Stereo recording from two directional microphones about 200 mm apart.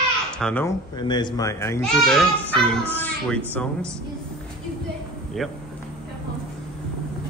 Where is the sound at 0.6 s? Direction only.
20° left (ahead or behind).